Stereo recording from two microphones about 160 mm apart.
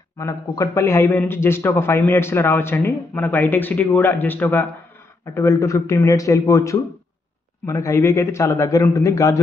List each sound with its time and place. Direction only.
0.2 s a man's voice: 20° left (ahead or behind)